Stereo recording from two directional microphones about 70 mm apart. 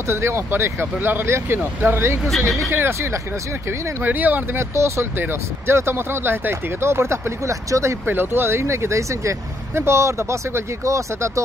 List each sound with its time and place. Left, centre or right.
0.1 s speech: right
4.0 s speech: right
4.6 s speech: right
8.1 s speech: right